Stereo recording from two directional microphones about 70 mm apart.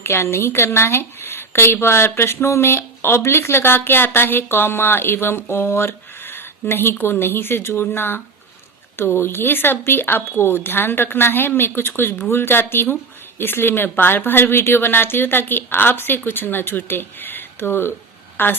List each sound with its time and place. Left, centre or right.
0.0 s a woman's voice: left